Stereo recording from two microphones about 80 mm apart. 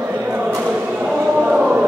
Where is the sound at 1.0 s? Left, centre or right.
Centre.